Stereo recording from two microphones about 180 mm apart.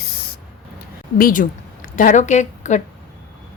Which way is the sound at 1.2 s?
50° left (ahead or behind).